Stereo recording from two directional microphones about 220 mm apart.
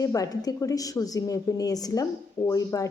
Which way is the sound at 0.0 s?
15° left (ahead or behind).